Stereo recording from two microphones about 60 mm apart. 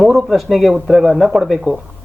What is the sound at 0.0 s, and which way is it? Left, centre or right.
Speech, centre.